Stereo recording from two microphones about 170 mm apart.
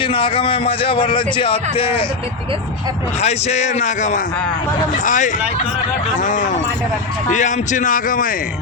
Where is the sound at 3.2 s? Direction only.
40° left (ahead or behind).